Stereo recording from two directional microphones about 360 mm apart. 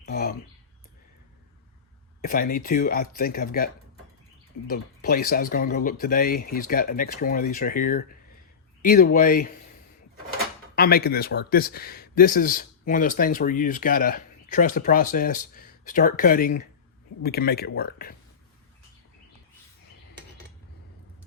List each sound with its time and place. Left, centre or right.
0.0 s a sound: left
2.2 s speech: left
4.7 s speech: left
10.8 s speech: left